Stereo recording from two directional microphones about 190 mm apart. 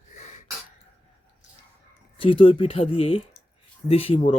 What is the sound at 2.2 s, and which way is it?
Speech, 25° left (ahead or behind).